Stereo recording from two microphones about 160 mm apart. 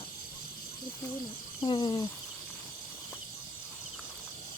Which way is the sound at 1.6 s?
30° left (ahead or behind).